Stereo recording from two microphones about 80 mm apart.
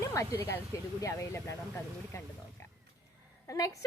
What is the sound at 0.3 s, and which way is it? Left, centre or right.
Speech, left.